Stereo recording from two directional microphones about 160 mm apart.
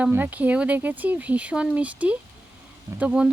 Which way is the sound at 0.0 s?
10° right (ahead or behind).